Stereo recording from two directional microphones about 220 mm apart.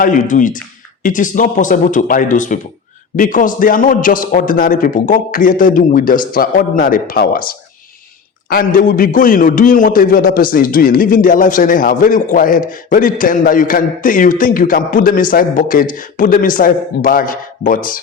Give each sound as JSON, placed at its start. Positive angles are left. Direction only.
{"t": 0.0, "sound": "a man's voice", "side_deg": 35}